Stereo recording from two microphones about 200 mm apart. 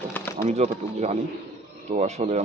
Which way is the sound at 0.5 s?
35° right (ahead or behind).